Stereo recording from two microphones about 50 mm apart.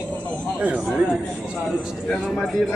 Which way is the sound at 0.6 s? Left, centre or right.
Right.